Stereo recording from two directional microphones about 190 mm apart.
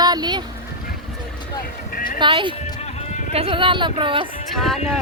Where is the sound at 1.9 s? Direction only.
45° left (ahead or behind).